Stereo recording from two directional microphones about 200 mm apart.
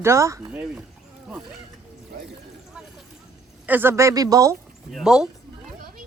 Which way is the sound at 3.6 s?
10° right (ahead or behind).